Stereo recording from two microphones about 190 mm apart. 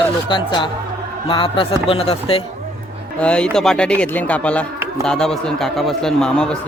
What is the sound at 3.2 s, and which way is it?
A man's voice, 5° left (ahead or behind).